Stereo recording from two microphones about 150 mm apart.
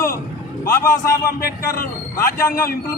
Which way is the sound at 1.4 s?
75° left (ahead or behind).